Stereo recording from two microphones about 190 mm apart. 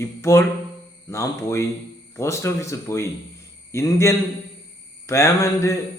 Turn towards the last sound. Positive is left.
turn(degrees=15)  # may be behind; listen again after turning